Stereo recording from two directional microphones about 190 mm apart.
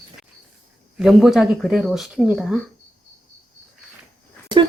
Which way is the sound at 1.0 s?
Centre (ahead or behind).